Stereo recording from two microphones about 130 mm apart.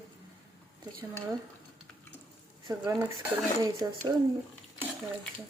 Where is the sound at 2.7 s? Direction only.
25° right (ahead or behind).